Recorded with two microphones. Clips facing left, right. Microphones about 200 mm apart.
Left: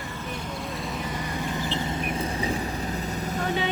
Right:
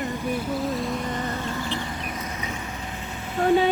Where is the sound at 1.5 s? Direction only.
20° left (ahead or behind); by 3.4 s 40° left (ahead or behind).